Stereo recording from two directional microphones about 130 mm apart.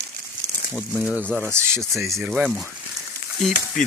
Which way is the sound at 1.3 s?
10° left (ahead or behind).